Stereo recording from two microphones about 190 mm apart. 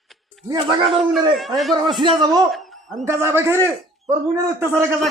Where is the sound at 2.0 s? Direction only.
25° right (ahead or behind).